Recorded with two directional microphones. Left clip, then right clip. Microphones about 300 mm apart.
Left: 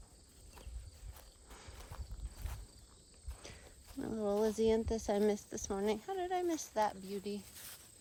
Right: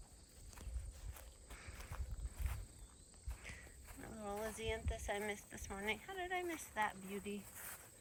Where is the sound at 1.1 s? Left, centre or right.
Centre.